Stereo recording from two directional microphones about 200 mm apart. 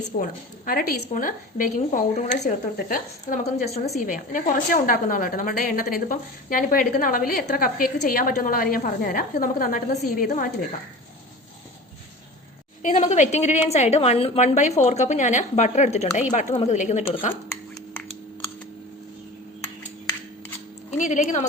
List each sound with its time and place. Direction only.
0.2 s a woman's voice: 45° left (ahead or behind)
2.4 s a woman's voice: 45° left (ahead or behind)
12.8 s a woman's voice: 35° left (ahead or behind)
21.0 s a woman's voice: 35° left (ahead or behind)